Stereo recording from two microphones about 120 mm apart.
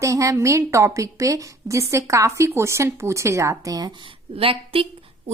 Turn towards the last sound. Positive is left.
turn(degrees=-50)  # may be behind; listen again after turning